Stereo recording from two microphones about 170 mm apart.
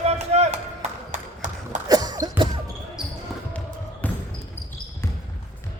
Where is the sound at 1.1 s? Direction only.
45° right (ahead or behind).